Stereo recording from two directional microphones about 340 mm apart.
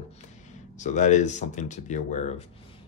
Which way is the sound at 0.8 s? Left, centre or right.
Left.